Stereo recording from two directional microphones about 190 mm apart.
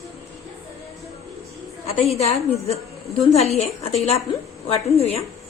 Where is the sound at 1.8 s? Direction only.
35° left (ahead or behind).